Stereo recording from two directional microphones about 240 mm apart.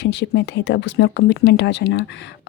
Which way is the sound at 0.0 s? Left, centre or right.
Left.